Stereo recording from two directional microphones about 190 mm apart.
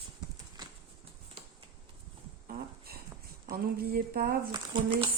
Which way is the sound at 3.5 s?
50° right (ahead or behind).